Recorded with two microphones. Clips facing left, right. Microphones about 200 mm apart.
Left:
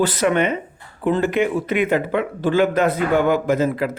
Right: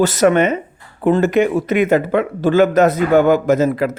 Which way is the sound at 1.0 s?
45° right (ahead or behind).